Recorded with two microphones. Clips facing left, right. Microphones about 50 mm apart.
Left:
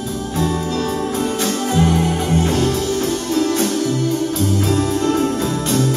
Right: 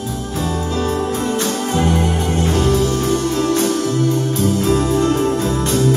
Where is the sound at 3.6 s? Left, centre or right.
Right.